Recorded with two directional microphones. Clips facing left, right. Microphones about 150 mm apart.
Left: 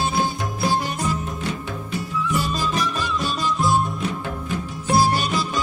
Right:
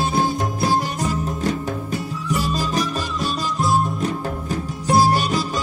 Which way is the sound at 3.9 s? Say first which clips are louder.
Right 3 dB; 40° right (ahead or behind).